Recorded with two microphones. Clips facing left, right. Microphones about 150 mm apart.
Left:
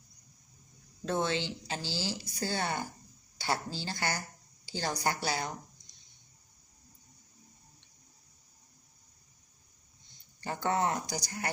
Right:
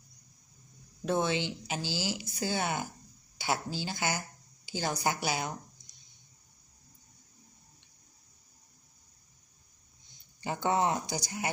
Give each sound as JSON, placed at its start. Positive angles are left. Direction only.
{"t": 1.0, "sound": "speech", "side_deg": -15}
{"t": 4.6, "sound": "a sound", "side_deg": -15}
{"t": 5.0, "sound": "speech", "side_deg": -15}
{"t": 10.4, "sound": "speech", "side_deg": -15}